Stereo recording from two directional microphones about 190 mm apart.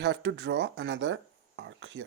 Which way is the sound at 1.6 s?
75° right (ahead or behind).